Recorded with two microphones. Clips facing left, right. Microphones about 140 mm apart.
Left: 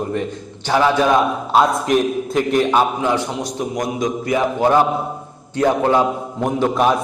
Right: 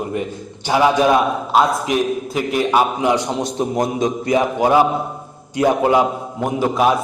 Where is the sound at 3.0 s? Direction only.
15° right (ahead or behind).